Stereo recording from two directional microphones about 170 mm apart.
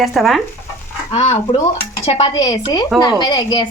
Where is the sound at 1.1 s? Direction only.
35° left (ahead or behind).